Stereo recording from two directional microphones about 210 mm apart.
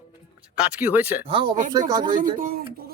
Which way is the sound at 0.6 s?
5° right (ahead or behind).